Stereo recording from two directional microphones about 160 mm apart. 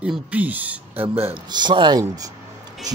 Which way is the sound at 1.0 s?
35° right (ahead or behind).